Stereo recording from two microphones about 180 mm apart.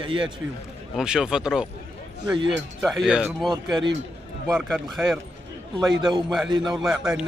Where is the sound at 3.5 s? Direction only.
25° right (ahead or behind).